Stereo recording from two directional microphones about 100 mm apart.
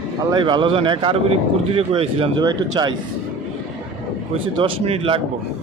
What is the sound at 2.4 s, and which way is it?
Speech, 45° right (ahead or behind).